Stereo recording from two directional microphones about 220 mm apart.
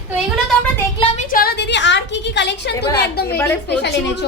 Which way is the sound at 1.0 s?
30° left (ahead or behind).